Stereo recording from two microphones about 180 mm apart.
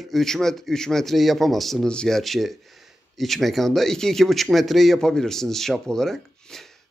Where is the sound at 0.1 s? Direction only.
Centre (ahead or behind).